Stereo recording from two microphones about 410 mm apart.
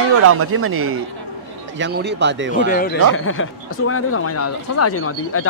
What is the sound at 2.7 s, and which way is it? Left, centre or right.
A man's voice, left.